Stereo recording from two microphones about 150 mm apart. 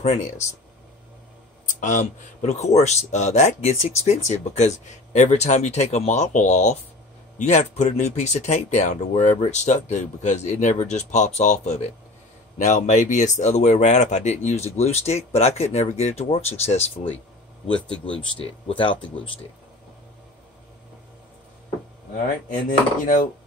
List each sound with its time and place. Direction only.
0.0 s speech: 50° left (ahead or behind)
1.8 s speech: 55° left (ahead or behind)
17.7 s speech: 5° left (ahead or behind)
18.0 s speech: 35° left (ahead or behind)
22.7 s speech: 65° left (ahead or behind)